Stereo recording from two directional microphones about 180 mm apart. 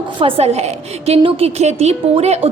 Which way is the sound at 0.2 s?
30° right (ahead or behind).